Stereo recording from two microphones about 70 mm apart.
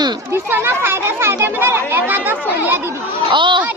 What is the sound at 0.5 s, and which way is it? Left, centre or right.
A child's voice, right.